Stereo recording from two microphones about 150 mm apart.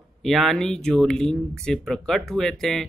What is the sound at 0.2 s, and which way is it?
Speech, centre (ahead or behind).